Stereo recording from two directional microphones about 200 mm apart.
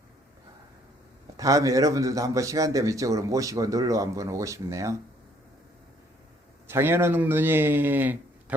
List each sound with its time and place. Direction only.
1.4 s a man's voice: 15° right (ahead or behind)
6.7 s a man's voice: 10° right (ahead or behind)